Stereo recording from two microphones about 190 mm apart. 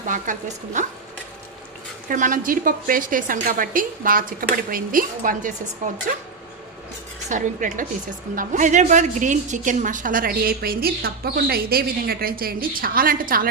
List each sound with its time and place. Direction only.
0.1 s speech: 40° right (ahead or behind)
2.0 s a woman's voice: 45° right (ahead or behind)
7.3 s a woman's voice: 40° right (ahead or behind)